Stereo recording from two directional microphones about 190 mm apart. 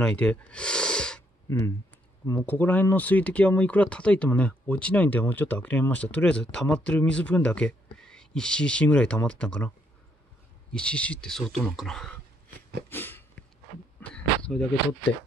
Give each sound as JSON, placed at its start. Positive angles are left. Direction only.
{"t": 0.0, "sound": "speech", "side_deg": 5}
{"t": 2.4, "sound": "speech", "side_deg": 10}
{"t": 10.7, "sound": "speech", "side_deg": 5}
{"t": 12.9, "sound": "a sound", "side_deg": 10}